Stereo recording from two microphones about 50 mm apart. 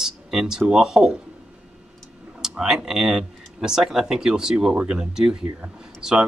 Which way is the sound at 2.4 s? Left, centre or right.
Centre.